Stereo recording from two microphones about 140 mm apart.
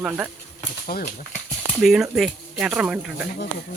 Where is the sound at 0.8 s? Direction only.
90° left.